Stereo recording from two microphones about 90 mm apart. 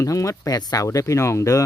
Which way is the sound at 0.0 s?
35° left (ahead or behind).